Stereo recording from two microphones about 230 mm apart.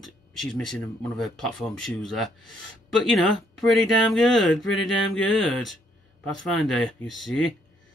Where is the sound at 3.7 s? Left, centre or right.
Centre.